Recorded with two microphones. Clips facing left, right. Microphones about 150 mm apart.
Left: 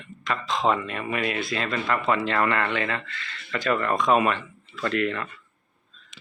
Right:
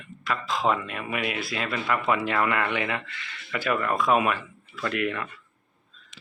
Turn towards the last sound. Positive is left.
turn(degrees=-10)  # may be behind; listen again after turning